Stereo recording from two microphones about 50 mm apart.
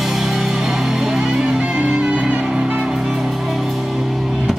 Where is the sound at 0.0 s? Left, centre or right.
Centre; by 2.4 s right.